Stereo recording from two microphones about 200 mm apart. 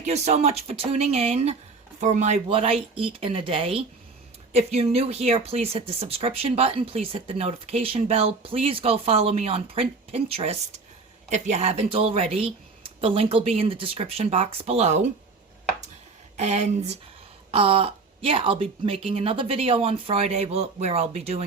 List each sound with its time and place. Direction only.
0.0 s speech: 35° right (ahead or behind)
16.4 s speech: 35° right (ahead or behind)